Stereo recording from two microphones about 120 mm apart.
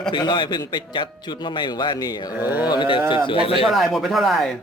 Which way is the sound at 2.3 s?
15° right (ahead or behind).